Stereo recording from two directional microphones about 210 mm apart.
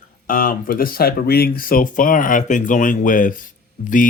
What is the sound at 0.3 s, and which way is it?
Speech, 40° left (ahead or behind).